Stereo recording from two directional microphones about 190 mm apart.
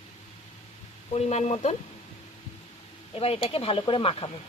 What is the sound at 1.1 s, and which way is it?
Speech, 35° left (ahead or behind).